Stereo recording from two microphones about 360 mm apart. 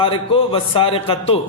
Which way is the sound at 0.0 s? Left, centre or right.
Centre.